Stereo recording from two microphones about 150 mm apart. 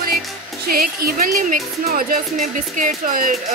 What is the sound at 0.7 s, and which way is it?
Speech, 80° right.